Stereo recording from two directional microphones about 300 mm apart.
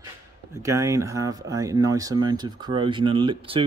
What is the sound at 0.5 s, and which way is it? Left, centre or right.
Speech, centre.